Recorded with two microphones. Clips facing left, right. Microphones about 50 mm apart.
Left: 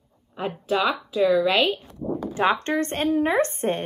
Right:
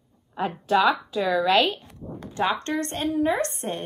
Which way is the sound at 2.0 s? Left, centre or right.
Left.